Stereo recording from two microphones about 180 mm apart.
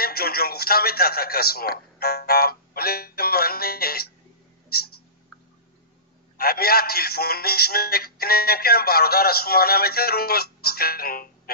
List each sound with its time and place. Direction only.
0.0 s a man's voice: 55° left (ahead or behind)
4.6 s a sound: 60° left (ahead or behind)
6.3 s a man's voice: 55° left (ahead or behind)